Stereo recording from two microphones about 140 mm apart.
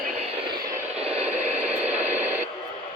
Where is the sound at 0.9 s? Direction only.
50° right (ahead or behind).